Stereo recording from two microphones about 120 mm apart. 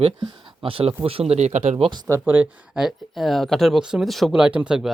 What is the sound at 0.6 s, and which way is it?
Speech, 50° right (ahead or behind).